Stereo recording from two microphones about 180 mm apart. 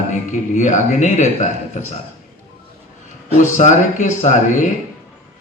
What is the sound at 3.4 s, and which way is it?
Speech, 45° left (ahead or behind).